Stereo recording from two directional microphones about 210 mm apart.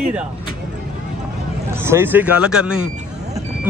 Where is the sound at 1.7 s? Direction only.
10° right (ahead or behind).